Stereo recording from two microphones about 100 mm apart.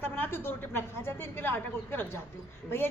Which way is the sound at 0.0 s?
20° left (ahead or behind).